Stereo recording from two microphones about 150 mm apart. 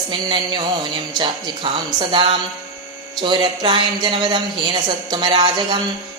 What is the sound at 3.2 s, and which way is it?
A woman's voice, 30° right (ahead or behind).